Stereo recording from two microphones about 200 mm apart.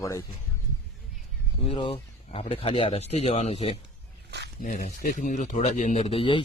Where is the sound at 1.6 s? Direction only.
25° left (ahead or behind).